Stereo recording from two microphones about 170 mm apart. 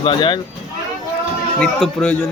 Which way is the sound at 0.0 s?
30° left (ahead or behind).